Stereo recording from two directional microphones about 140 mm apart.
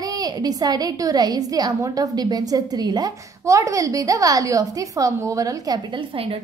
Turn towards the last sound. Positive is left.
turn(degrees=-40)  # may be behind; listen again after turning